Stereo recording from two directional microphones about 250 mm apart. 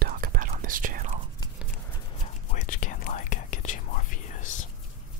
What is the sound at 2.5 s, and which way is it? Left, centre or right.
Whispering, left.